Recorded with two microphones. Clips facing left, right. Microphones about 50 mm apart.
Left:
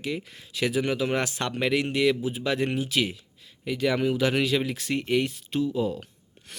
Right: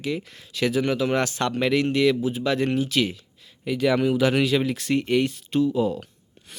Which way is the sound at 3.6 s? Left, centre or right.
Centre.